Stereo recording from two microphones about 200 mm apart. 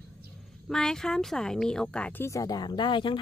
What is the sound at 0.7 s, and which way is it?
Speech, centre (ahead or behind).